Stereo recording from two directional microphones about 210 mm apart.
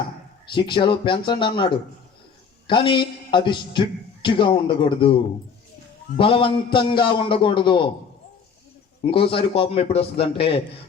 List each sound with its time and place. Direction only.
0.5 s a man's voice: 25° left (ahead or behind)
9.0 s a man's voice: 25° left (ahead or behind)